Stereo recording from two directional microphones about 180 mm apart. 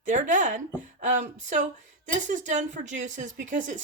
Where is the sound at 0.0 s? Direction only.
45° right (ahead or behind).